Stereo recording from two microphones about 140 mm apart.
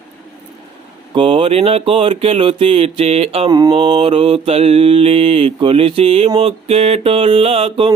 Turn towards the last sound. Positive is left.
turn(degrees=-40)  # may be behind; listen again after turning